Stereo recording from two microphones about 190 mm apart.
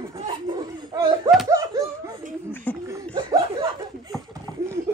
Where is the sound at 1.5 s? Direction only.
15° right (ahead or behind).